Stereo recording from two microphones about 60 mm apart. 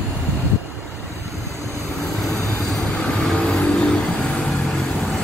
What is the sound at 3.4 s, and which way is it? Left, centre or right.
Vehicle, centre.